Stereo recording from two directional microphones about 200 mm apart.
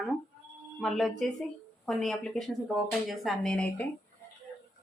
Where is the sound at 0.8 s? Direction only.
Centre (ahead or behind).